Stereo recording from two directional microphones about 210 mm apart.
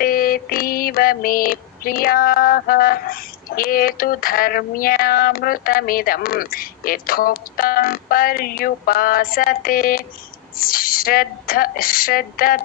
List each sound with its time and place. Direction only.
0.0 s female singing: 45° left (ahead or behind)